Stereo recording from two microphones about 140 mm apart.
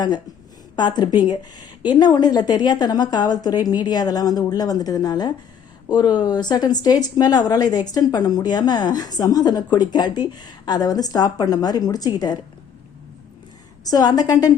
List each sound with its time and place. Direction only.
0.8 s speech: 30° left (ahead or behind)
13.8 s speech: 30° left (ahead or behind)